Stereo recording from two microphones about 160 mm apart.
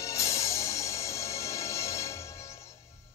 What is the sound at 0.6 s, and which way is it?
Music, 20° left (ahead or behind).